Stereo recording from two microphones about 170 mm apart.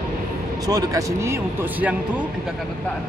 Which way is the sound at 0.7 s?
20° right (ahead or behind).